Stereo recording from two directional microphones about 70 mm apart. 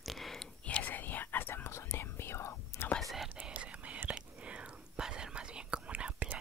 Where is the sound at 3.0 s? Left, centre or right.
Centre.